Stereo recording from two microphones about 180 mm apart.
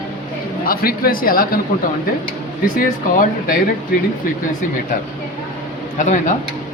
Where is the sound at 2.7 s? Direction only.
50° left (ahead or behind).